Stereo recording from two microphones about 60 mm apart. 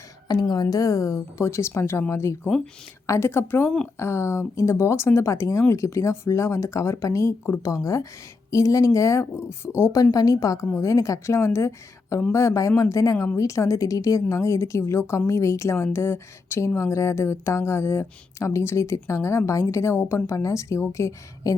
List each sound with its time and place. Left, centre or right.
0.4 s a woman's voice: left
11.3 s a woman's voice: left
13.1 s a woman's voice: left
13.4 s a woman's voice: left